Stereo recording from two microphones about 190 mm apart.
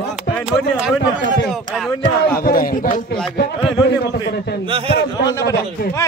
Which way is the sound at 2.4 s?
50° left (ahead or behind).